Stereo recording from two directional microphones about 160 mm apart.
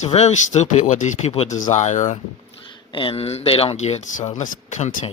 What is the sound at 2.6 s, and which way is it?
Speech, 30° left (ahead or behind).